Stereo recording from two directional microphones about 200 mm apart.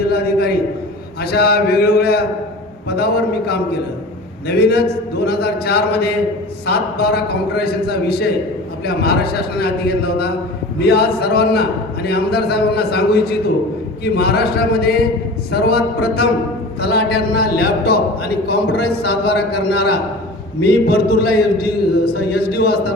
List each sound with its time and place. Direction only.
0.1 s a man's voice: 50° left (ahead or behind)